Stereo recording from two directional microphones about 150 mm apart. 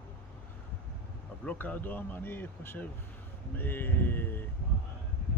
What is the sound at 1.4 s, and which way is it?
Speech, 10° left (ahead or behind).